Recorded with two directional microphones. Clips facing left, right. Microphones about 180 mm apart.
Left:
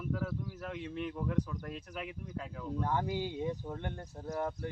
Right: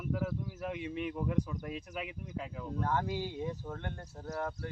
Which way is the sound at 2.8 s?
15° left (ahead or behind).